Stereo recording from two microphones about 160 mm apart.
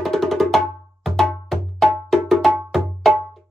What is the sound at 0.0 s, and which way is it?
Music, centre (ahead or behind).